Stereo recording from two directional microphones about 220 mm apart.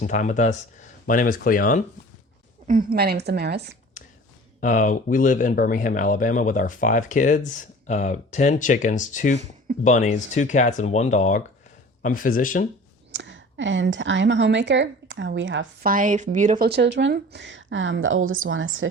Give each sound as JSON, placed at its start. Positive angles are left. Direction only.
{"t": 0.0, "sound": "speech", "side_deg": 35}
{"t": 2.6, "sound": "speech", "side_deg": -40}
{"t": 4.0, "sound": "a sound", "side_deg": 35}
{"t": 4.6, "sound": "speech", "side_deg": 35}
{"t": 13.1, "sound": "speech", "side_deg": -55}
{"t": 15.8, "sound": "speech", "side_deg": -40}